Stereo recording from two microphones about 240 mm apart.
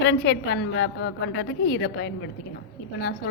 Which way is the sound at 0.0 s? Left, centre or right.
Left.